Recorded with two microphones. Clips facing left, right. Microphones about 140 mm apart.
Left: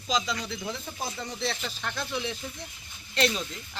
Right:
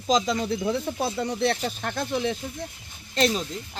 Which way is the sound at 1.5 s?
45° right (ahead or behind).